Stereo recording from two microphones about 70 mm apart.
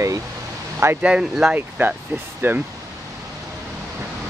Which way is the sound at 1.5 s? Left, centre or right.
Right.